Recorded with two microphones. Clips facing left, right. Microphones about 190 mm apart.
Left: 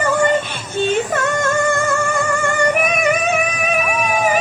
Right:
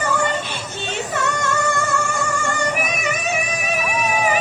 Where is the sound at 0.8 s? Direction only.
50° left (ahead or behind).